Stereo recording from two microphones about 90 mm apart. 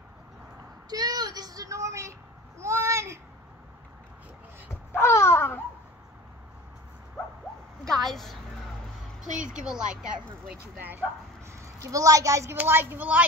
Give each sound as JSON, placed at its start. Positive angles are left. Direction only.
{"t": 0.8, "sound": "child singing", "side_deg": -50}
{"t": 2.6, "sound": "a sound", "side_deg": -30}
{"t": 4.9, "sound": "a sound", "side_deg": 30}
{"t": 7.9, "sound": "a woman's voice", "side_deg": 5}
{"t": 10.8, "sound": "speech", "side_deg": -20}
{"t": 11.5, "sound": "a woman's voice", "side_deg": -35}
{"t": 12.5, "sound": "speech", "side_deg": -25}